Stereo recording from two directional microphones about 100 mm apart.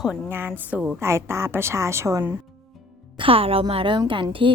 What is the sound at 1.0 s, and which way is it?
A woman's voice, 25° right (ahead or behind).